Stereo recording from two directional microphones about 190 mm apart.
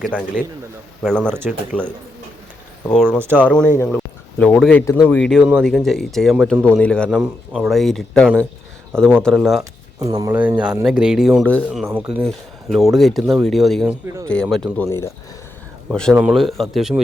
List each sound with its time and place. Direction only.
0.0 s speech: centre (ahead or behind)
10.0 s speech: 15° right (ahead or behind)
10.3 s speech: 5° right (ahead or behind)
14.8 s speech: 15° left (ahead or behind)
15.9 s speech: 5° left (ahead or behind)